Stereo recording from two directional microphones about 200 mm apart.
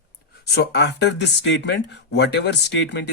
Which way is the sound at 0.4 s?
55° left (ahead or behind).